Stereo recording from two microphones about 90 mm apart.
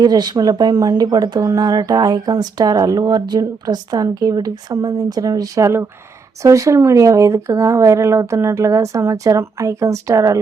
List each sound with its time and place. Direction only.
0.0 s speech: 50° right (ahead or behind)